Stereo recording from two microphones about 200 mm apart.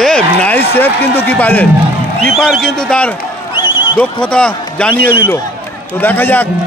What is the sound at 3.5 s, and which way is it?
Basketball bounce, 25° left (ahead or behind).